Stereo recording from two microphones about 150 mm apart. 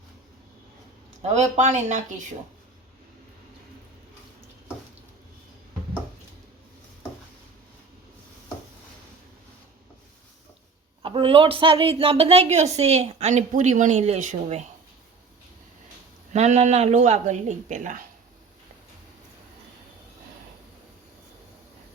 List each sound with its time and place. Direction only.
1.2 s a woman's voice: 50° right (ahead or behind)
11.0 s a woman's voice: 35° right (ahead or behind); by 14.6 s 50° right (ahead or behind)
16.3 s a woman's voice: 50° right (ahead or behind)